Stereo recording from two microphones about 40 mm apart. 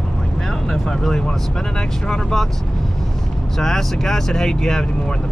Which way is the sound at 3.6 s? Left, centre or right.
Centre.